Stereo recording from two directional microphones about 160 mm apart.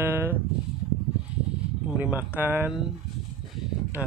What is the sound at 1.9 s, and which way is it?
Speech, 10° right (ahead or behind).